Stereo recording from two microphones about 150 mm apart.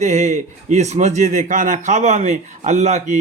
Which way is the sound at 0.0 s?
50° right (ahead or behind).